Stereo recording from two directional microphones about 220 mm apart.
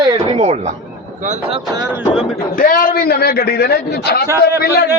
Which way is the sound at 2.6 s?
40° left (ahead or behind).